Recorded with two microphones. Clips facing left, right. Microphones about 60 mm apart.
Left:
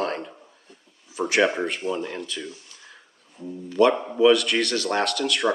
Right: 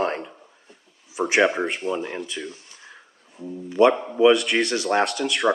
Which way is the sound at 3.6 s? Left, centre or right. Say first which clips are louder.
Right 2 dB; centre.